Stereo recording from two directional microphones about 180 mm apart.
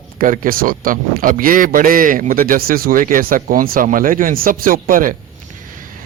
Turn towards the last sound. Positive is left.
turn(degrees=-50)  # may be behind; listen again after turning